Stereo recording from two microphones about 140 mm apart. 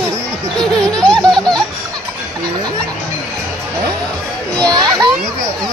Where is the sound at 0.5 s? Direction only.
5° left (ahead or behind).